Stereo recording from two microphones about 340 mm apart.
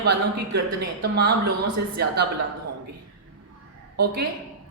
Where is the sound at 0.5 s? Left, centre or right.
Right.